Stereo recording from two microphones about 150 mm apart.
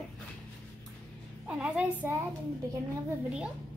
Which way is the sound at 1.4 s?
5° right (ahead or behind).